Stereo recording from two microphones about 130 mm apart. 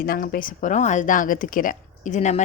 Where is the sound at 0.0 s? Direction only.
90° left.